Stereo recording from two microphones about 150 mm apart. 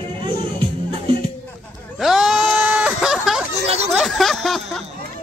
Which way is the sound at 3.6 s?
45° right (ahead or behind).